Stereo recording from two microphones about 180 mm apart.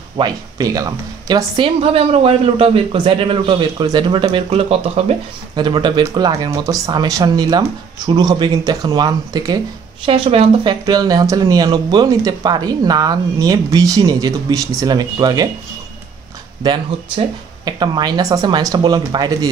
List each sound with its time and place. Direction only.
0.2 s a woman's voice: 20° right (ahead or behind)
16.6 s a woman's voice: 25° right (ahead or behind)